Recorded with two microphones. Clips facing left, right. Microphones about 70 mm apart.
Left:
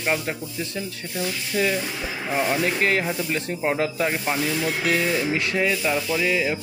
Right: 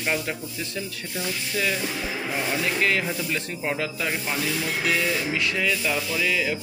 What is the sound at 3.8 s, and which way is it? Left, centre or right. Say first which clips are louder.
Speech: left 5 dB; left.